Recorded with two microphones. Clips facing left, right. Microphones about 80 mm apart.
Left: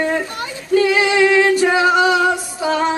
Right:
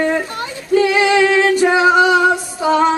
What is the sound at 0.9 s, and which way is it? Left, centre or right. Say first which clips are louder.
Female singing: right 2 dB; centre.